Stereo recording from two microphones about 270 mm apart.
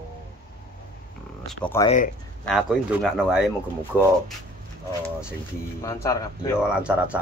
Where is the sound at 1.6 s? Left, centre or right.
Centre.